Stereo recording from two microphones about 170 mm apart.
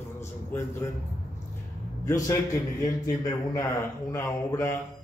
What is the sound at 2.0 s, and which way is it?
A man's voice, 20° left (ahead or behind).